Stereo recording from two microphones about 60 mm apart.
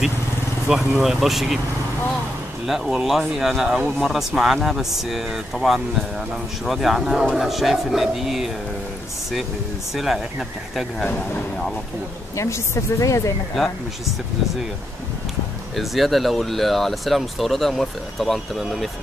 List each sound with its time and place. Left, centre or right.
0.7 s speech: centre
2.6 s speech: centre
9.9 s speech: centre
11.0 s speech: centre
12.4 s a woman's voice: left
15.7 s speech: centre